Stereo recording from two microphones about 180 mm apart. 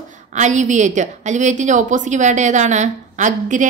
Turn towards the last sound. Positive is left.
turn(degrees=-45)  # may be behind; listen again after turning